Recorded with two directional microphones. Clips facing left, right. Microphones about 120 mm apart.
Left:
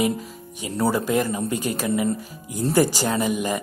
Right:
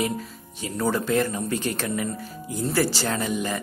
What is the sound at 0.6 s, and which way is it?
Speech, 10° left (ahead or behind).